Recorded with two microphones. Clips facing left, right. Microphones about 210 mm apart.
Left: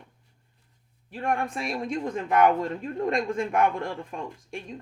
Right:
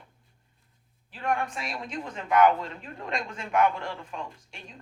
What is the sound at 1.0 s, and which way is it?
Speech, 55° left (ahead or behind).